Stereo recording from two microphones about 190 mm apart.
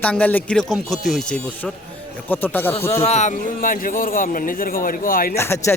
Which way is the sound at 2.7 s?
30° left (ahead or behind).